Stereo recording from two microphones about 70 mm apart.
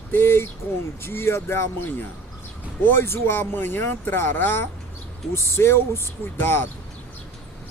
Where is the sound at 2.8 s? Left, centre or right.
Left.